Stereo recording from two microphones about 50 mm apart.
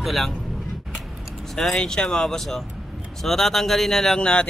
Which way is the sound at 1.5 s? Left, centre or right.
Centre.